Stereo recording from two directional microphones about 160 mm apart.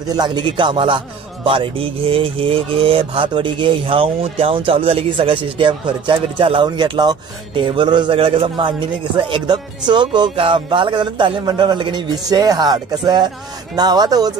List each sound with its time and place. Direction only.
0.1 s speech: 25° right (ahead or behind)